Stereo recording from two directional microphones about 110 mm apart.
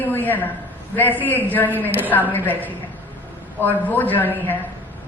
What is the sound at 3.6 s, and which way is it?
Speech, 15° left (ahead or behind).